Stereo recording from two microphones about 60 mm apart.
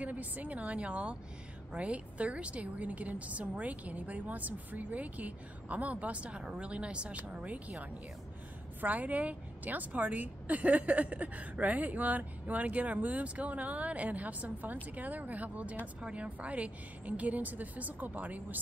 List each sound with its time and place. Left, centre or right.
0.0 s a woman's voice: right
8.8 s a woman's voice: right